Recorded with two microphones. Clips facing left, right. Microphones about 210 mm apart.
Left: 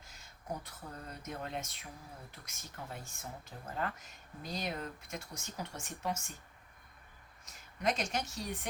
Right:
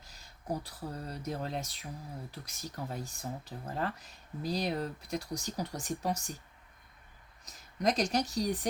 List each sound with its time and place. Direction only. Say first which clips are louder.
0.0 s speech: right 4 dB; 35° right (ahead or behind)
7.4 s speech: right 4 dB; 35° right (ahead or behind)